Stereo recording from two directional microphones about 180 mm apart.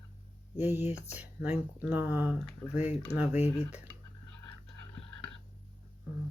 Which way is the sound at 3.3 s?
40° left (ahead or behind).